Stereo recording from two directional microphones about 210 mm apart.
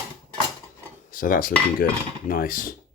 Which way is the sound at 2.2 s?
45° left (ahead or behind).